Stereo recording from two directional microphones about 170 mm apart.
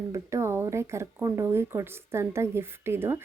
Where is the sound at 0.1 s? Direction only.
15° right (ahead or behind).